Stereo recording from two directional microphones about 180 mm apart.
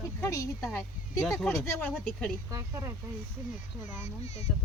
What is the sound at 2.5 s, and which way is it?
Speech, 15° right (ahead or behind).